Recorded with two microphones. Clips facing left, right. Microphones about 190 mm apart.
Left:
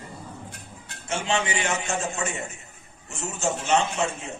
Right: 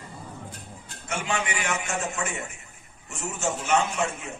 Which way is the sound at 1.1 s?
25° left (ahead or behind).